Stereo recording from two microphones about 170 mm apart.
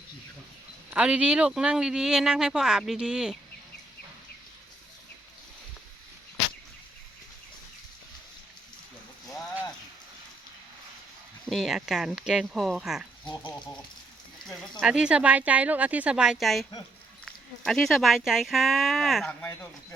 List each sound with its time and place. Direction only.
0.9 s speech: 5° right (ahead or behind)
11.4 s speech: centre (ahead or behind)
13.4 s a sound: 25° left (ahead or behind)
14.4 s speech: centre (ahead or behind)